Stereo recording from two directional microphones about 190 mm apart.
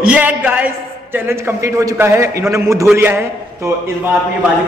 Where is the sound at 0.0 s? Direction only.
5° right (ahead or behind).